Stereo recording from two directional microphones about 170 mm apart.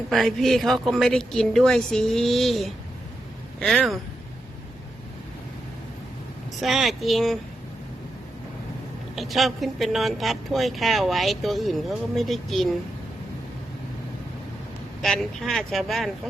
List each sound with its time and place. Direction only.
0.1 s speech: centre (ahead or behind)
6.6 s speech: centre (ahead or behind)
9.1 s speech: centre (ahead or behind)
15.0 s speech: centre (ahead or behind)